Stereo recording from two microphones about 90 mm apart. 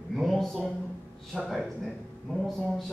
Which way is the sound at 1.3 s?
15° left (ahead or behind).